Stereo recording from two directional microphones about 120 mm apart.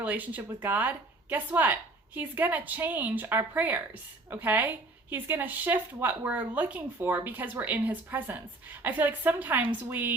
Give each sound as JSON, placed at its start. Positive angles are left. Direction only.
{"t": 0.0, "sound": "a woman's voice", "side_deg": -15}